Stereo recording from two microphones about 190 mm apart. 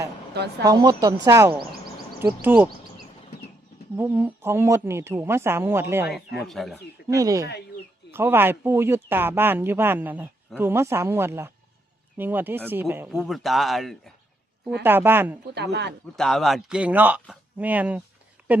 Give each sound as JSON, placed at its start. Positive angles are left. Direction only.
{"t": 0.3, "sound": "speech", "side_deg": -60}
{"t": 0.7, "sound": "speech", "side_deg": -20}
{"t": 3.9, "sound": "speech", "side_deg": -10}
{"t": 6.4, "sound": "speech", "side_deg": 0}
{"t": 7.1, "sound": "speech", "side_deg": -15}
{"t": 13.1, "sound": "speech", "side_deg": 0}
{"t": 14.8, "sound": "speech", "side_deg": -10}
{"t": 15.5, "sound": "speech", "side_deg": -60}
{"t": 16.1, "sound": "speech", "side_deg": 5}
{"t": 18.4, "sound": "a sound", "side_deg": -5}